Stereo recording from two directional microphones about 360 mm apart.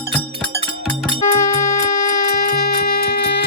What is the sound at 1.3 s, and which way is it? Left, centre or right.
Music, centre.